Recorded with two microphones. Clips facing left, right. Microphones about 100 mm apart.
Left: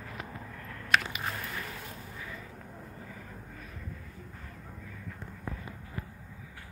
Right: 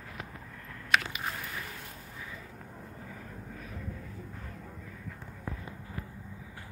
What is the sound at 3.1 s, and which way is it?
Vehicle, centre (ahead or behind).